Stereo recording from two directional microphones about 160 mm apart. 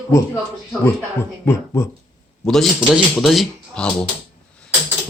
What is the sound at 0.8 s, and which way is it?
Speech, 15° left (ahead or behind).